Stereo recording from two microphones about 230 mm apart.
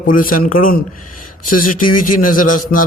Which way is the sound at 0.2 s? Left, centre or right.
Left.